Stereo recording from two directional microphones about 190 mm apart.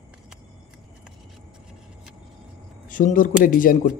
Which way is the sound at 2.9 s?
45° left (ahead or behind).